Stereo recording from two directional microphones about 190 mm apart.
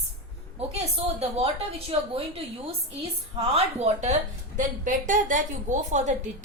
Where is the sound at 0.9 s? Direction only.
30° right (ahead or behind).